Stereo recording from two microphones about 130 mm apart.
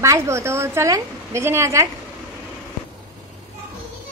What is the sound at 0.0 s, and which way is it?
A woman's voice, 20° right (ahead or behind).